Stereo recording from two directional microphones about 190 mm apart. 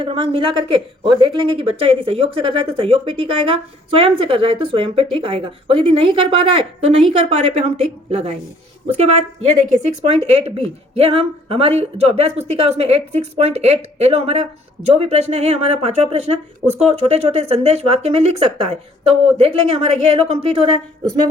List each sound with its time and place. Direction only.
0.0 s speech: 30° right (ahead or behind)
8.9 s speech: 35° right (ahead or behind)